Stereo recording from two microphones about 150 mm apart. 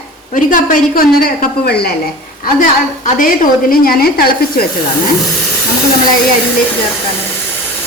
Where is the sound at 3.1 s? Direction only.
65° left (ahead or behind); by 4.3 s 90° left.